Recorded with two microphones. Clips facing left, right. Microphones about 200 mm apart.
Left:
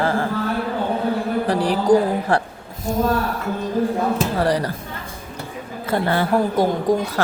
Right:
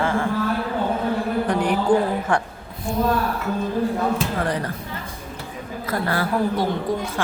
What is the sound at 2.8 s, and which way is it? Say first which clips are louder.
Speech: left 2 dB; 45° left (ahead or behind).